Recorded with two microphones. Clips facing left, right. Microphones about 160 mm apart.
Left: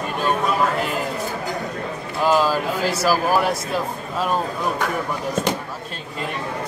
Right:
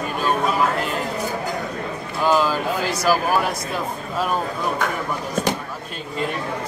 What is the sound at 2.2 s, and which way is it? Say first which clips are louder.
Speech: left 1 dB; 5° left (ahead or behind).